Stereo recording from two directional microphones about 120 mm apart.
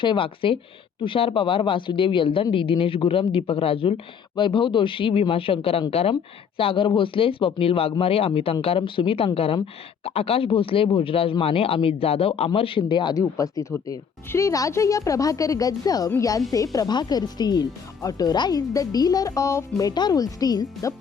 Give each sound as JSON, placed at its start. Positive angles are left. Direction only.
{"t": 0.0, "sound": "speech", "side_deg": 45}
{"t": 16.7, "sound": "speech", "side_deg": 35}